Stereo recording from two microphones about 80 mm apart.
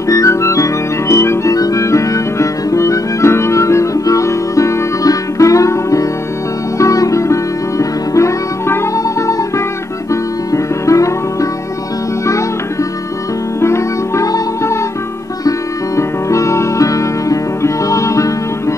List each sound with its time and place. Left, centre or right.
0.1 s music: left
10.5 s music: left
13.6 s music: left
16.0 s music: left